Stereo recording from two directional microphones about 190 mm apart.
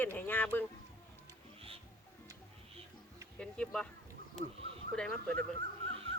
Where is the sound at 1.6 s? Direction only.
30° right (ahead or behind).